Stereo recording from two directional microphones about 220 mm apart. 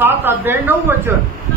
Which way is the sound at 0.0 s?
10° right (ahead or behind).